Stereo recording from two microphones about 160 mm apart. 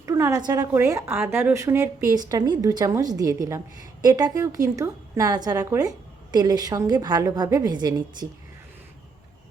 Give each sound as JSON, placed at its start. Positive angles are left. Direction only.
{"t": 0.0, "sound": "a woman's voice", "side_deg": -20}